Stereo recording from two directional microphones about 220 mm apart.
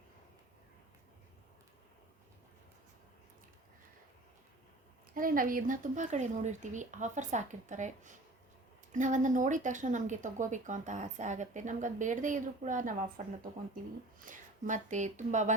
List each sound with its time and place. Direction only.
5.1 s speech: 40° right (ahead or behind)